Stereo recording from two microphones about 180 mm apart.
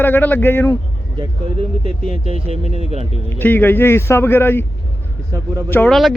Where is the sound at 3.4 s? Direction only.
10° left (ahead or behind).